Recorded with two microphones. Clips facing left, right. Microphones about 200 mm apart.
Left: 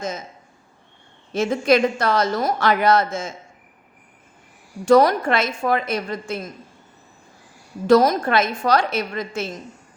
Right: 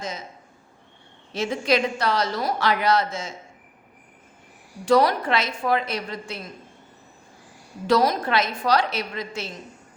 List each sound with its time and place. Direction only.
1.3 s speech: 50° left (ahead or behind)
4.9 s speech: 45° left (ahead or behind)
7.9 s speech: 50° left (ahead or behind)